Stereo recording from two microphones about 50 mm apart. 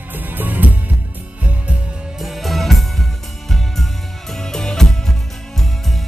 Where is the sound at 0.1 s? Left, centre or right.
Right.